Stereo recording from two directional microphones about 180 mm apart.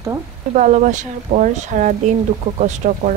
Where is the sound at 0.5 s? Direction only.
40° right (ahead or behind).